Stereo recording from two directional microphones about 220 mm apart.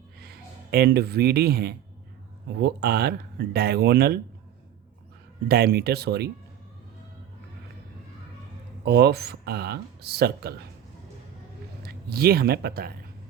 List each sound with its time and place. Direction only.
0.2 s speech: 45° right (ahead or behind)
5.5 s speech: 45° right (ahead or behind)
8.8 s speech: 45° right (ahead or behind)
11.8 s speech: 45° right (ahead or behind)